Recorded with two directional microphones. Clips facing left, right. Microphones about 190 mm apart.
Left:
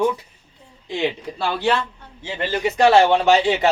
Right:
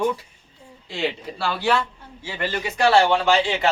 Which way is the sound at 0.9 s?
20° left (ahead or behind).